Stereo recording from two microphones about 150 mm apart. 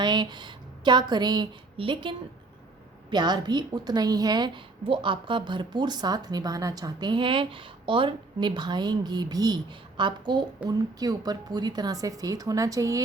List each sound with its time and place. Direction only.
0.0 s a woman's voice: 30° right (ahead or behind)